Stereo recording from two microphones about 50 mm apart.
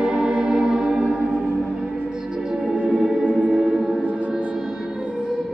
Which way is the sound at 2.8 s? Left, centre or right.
Centre.